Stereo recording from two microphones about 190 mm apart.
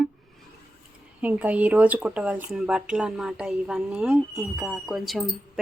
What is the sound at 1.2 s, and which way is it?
Speech, 10° right (ahead or behind).